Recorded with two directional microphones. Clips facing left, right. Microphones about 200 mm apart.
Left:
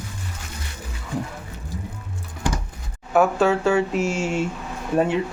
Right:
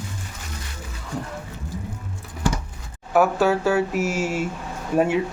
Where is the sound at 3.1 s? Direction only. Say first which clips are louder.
Even; 5° right (ahead or behind).